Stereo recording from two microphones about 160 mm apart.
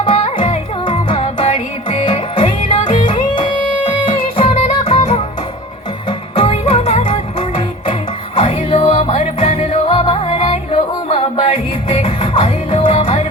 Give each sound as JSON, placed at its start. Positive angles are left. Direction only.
{"t": 0.0, "sound": "music", "side_deg": 35}